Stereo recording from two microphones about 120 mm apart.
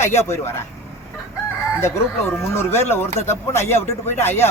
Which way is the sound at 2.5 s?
20° left (ahead or behind).